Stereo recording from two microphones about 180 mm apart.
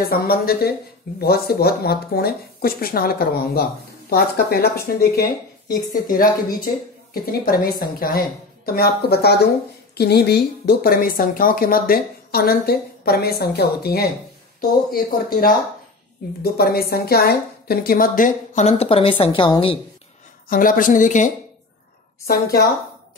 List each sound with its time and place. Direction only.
0.0 s a woman's voice: 55° left (ahead or behind)
7.2 s a woman's voice: 55° left (ahead or behind); by 19.8 s 30° left (ahead or behind)
20.4 s a woman's voice: 50° left (ahead or behind)
22.2 s a woman's voice: 60° left (ahead or behind)